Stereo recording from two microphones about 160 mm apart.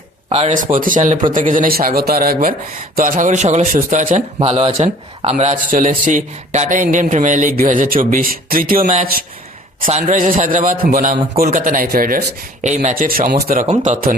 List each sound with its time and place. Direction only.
0.3 s a man's voice: 45° right (ahead or behind)
4.4 s a man's voice: 40° right (ahead or behind); by 12.2 s 65° right (ahead or behind)
12.6 s a man's voice: 50° right (ahead or behind)